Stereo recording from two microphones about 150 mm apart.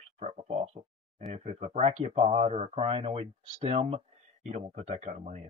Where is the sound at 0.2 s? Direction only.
45° right (ahead or behind).